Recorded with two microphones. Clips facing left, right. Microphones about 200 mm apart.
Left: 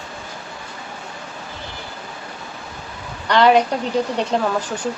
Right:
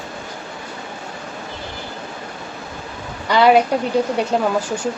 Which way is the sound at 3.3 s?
10° right (ahead or behind).